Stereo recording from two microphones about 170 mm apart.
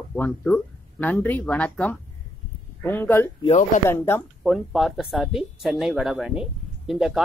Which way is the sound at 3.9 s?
15° left (ahead or behind).